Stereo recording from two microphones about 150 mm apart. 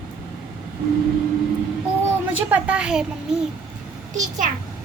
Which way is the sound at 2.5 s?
10° right (ahead or behind).